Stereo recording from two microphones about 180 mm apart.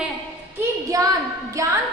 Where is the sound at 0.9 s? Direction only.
20° right (ahead or behind).